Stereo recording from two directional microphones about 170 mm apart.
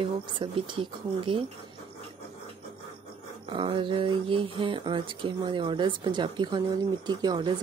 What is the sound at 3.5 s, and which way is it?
Speech, 30° right (ahead or behind).